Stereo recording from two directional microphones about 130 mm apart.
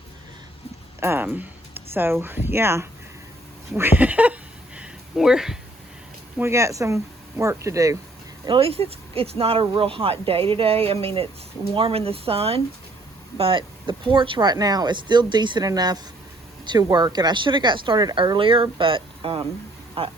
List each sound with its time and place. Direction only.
0.9 s speech: 20° right (ahead or behind)
3.8 s a sound: 15° right (ahead or behind)
6.4 s speech: 20° right (ahead or behind)
8.4 s speech: 45° right (ahead or behind)